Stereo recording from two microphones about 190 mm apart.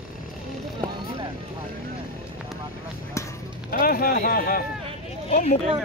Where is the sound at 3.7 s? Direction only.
50° left (ahead or behind).